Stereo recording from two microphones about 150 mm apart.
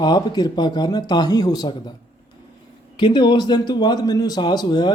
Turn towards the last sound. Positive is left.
turn(degrees=30)  # may be behind; listen again after turning